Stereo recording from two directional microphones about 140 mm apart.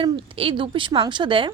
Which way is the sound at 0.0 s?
35° right (ahead or behind).